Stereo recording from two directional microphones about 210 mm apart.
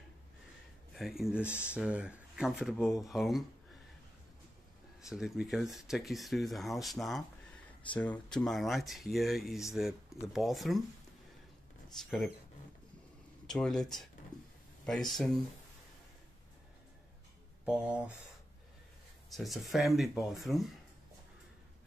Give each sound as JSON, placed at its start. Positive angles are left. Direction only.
{"t": 0.9, "sound": "speech", "side_deg": 0}
{"t": 5.0, "sound": "speech", "side_deg": 0}
{"t": 11.9, "sound": "speech", "side_deg": 0}
{"t": 13.5, "sound": "speech", "side_deg": 0}
{"t": 14.3, "sound": "a sound", "side_deg": 20}
{"t": 14.9, "sound": "speech", "side_deg": 0}
{"t": 17.6, "sound": "speech", "side_deg": -5}
{"t": 19.3, "sound": "speech", "side_deg": 0}